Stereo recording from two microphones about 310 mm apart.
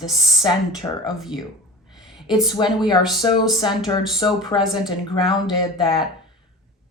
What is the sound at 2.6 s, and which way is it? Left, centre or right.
Speech, centre.